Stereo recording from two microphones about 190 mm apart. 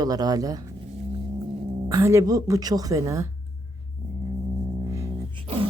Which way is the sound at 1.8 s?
15° right (ahead or behind).